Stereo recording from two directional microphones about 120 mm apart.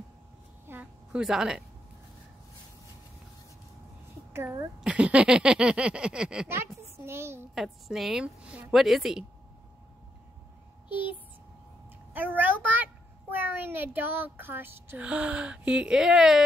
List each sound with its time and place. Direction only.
0.7 s a sound: 10° right (ahead or behind)
4.3 s a woman's voice: 20° right (ahead or behind)
4.8 s speech: 10° right (ahead or behind)
7.1 s a woman's voice: 20° right (ahead or behind)
7.5 s a woman's voice: centre (ahead or behind)
10.9 s a child's voice: 15° right (ahead or behind)